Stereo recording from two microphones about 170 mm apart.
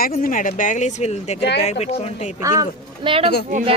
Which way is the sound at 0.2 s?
50° left (ahead or behind).